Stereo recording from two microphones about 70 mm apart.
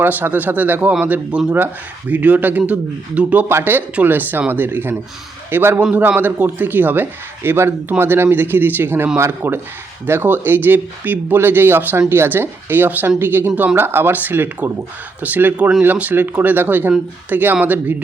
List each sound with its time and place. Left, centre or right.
0.0 s a man's voice: right